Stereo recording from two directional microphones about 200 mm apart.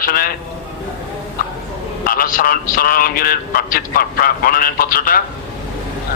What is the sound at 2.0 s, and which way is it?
A man's voice, 45° left (ahead or behind).